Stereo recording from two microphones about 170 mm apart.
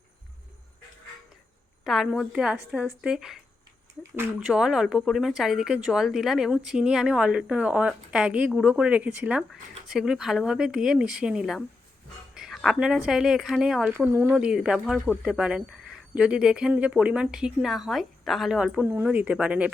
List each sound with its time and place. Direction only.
1.8 s a woman's voice: centre (ahead or behind)